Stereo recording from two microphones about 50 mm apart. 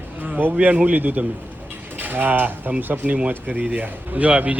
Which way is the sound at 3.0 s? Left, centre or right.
Right.